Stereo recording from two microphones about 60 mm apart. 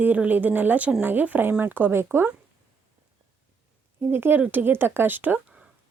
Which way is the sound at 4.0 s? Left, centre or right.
Right.